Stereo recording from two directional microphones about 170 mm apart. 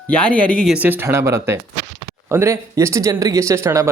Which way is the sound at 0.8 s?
10° right (ahead or behind).